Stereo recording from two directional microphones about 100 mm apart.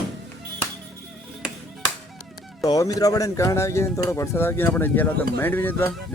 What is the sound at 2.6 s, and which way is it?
Speech, 35° left (ahead or behind).